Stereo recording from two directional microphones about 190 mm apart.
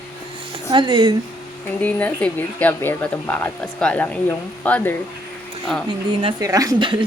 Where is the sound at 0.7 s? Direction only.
25° right (ahead or behind).